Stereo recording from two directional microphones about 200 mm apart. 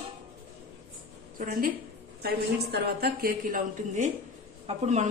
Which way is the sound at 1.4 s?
45° right (ahead or behind).